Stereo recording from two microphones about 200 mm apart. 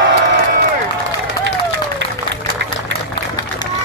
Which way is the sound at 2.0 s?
60° right (ahead or behind).